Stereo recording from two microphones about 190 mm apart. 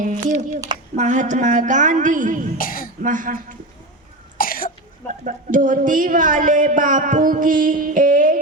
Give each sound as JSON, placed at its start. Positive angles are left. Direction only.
{"t": 0.0, "sound": "a woman's voice", "side_deg": -45}
{"t": 2.6, "sound": "speech", "side_deg": 45}
{"t": 3.0, "sound": "speech", "side_deg": -45}
{"t": 4.4, "sound": "cough", "side_deg": 50}
{"t": 5.2, "sound": "speech", "side_deg": -45}